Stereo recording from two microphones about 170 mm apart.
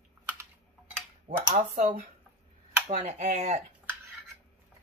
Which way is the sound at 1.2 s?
40° right (ahead or behind).